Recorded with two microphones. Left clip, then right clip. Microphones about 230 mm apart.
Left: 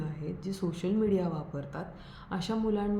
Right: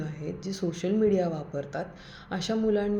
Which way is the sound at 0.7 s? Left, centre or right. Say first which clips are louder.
Right 5 dB; centre.